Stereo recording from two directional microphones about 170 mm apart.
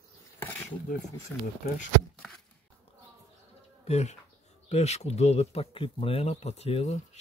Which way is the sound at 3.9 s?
40° left (ahead or behind).